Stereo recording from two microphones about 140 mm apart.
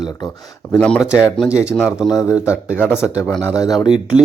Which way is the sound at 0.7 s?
10° left (ahead or behind).